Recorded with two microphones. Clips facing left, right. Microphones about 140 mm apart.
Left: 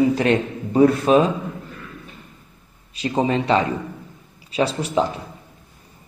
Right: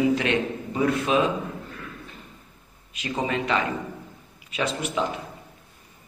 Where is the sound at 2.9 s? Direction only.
35° left (ahead or behind).